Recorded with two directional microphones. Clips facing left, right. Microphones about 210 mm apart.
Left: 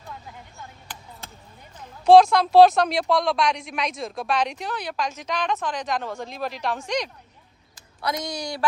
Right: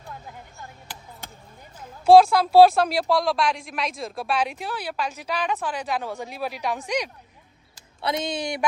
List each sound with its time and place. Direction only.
1.8 s speech: 5° right (ahead or behind)
8.0 s speech: 25° right (ahead or behind)